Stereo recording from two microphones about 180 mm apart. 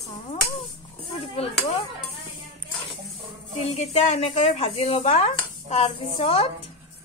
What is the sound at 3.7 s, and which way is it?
Speech, 40° left (ahead or behind).